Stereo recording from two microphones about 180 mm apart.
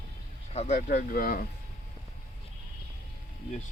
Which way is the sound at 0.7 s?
50° left (ahead or behind).